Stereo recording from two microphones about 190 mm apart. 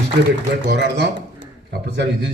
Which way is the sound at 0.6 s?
65° right (ahead or behind).